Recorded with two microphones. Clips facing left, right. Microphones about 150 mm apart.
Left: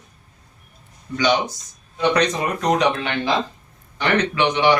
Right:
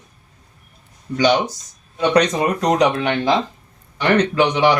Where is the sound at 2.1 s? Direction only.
40° right (ahead or behind).